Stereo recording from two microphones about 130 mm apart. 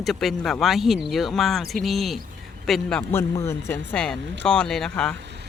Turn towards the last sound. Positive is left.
turn(degrees=5)  # may be behind; listen again after turning